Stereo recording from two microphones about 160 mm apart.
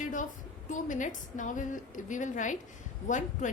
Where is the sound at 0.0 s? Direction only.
50° left (ahead or behind).